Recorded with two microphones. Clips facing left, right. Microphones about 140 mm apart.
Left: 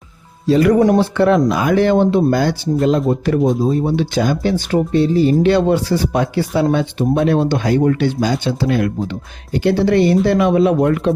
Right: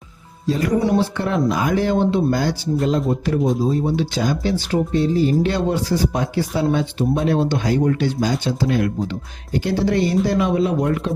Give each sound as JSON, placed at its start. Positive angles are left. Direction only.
{"t": 0.4, "sound": "speech", "side_deg": 80}
{"t": 0.8, "sound": "speech", "side_deg": 60}
{"t": 4.7, "sound": "speech", "side_deg": 70}